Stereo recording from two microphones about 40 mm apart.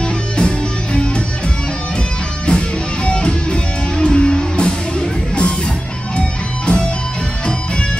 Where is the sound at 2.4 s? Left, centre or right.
Left.